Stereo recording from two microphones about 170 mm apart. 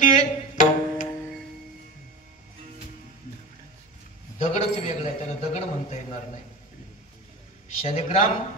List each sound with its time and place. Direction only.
0.0 s music: 50° left (ahead or behind)
4.4 s a man's voice: 40° left (ahead or behind)
7.8 s a man's voice: 35° left (ahead or behind)